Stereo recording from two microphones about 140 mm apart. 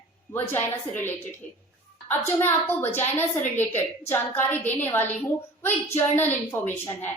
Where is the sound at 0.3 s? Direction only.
15° left (ahead or behind).